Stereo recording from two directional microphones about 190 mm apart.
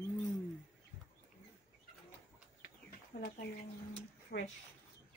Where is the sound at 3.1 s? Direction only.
50° left (ahead or behind).